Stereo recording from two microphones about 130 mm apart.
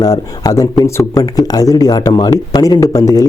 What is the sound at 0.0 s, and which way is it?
Speech, 30° left (ahead or behind).